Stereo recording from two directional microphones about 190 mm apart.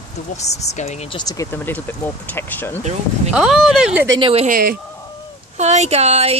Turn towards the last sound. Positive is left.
turn(degrees=-35)  # may be behind; listen again after turning